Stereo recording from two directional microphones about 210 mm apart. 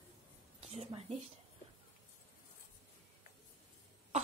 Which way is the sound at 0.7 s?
30° right (ahead or behind).